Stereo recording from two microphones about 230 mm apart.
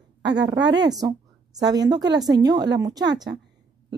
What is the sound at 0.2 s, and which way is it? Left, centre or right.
Speech, right.